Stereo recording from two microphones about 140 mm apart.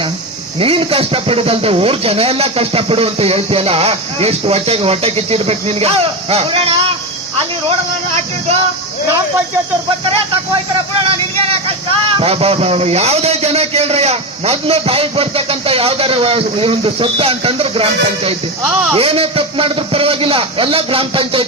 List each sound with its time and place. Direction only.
0.6 s speech: 40° right (ahead or behind)
8.1 s music: 50° right (ahead or behind)
11.1 s speech: 40° right (ahead or behind)
18.6 s speech: 5° right (ahead or behind)
18.9 s a man's voice: 45° right (ahead or behind)